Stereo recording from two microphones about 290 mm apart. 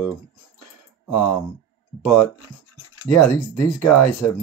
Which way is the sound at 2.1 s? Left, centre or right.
Left.